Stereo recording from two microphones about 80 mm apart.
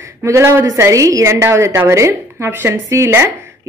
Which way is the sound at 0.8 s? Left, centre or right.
Right.